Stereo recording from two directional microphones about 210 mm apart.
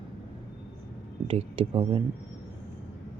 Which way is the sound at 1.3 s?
25° right (ahead or behind).